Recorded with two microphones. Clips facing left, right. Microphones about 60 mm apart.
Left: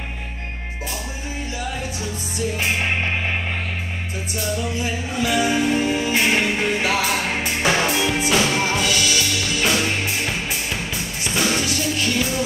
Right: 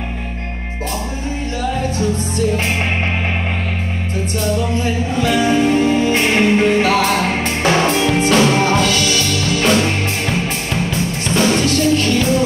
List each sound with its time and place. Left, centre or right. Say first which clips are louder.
1.8 s music: right 10 dB; right
4.5 s music: right 5 dB; right